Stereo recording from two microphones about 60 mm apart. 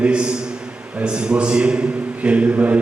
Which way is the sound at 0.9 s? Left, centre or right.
Centre.